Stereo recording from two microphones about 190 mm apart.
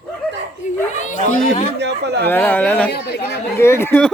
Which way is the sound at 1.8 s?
60° right (ahead or behind).